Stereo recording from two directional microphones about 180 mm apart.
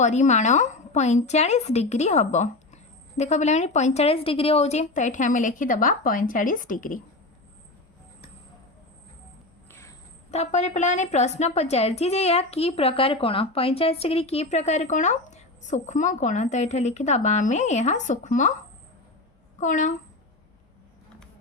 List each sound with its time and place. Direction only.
0.0 s a woman's voice: 40° left (ahead or behind)
9.6 s cricket: 15° left (ahead or behind)
10.3 s a woman's voice: 40° left (ahead or behind)
19.5 s a woman's voice: 45° left (ahead or behind)